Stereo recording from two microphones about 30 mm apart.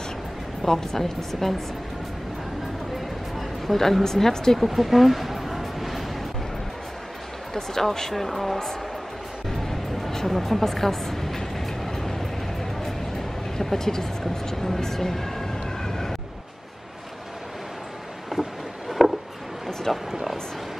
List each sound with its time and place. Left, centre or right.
0.7 s speech: centre
3.3 s a woman's voice: centre
4.6 s a sound: centre
7.5 s speech: centre
9.5 s music: centre
13.6 s speech: centre
14.2 s vehicle: centre
18.9 s a sound: centre